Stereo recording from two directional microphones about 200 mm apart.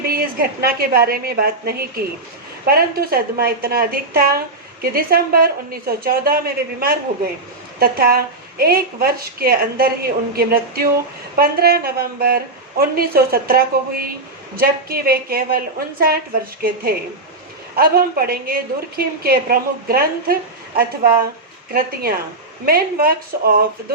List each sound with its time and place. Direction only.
0.1 s a woman's voice: 50° right (ahead or behind)